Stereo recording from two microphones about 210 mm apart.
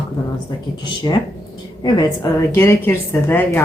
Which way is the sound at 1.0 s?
15° left (ahead or behind).